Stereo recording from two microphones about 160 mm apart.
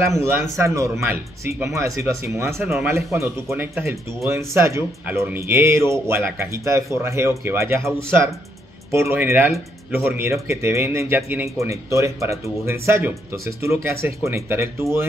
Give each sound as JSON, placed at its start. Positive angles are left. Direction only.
{"t": 0.0, "sound": "speech", "side_deg": -15}